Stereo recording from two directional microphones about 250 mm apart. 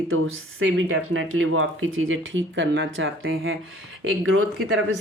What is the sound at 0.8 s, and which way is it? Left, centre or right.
Speech, right.